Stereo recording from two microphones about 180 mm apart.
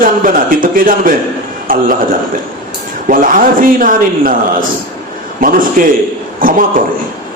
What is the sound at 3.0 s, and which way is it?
A man's voice, 50° right (ahead or behind).